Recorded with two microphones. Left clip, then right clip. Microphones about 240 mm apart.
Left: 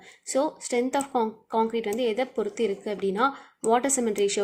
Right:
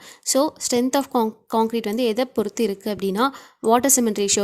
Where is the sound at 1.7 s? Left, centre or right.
Right.